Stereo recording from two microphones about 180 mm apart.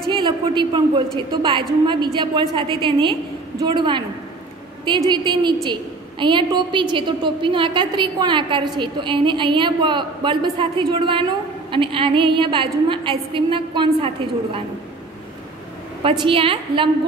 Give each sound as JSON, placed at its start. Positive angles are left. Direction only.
{"t": 0.1, "sound": "a woman's voice", "side_deg": -25}
{"t": 16.0, "sound": "a woman's voice", "side_deg": -30}